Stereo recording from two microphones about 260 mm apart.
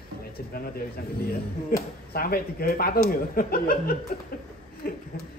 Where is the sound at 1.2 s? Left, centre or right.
Left.